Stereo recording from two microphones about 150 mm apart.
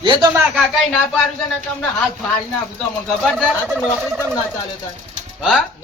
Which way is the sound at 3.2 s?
5° right (ahead or behind).